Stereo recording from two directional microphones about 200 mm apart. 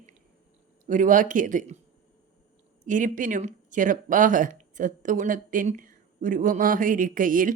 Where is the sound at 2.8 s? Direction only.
40° right (ahead or behind).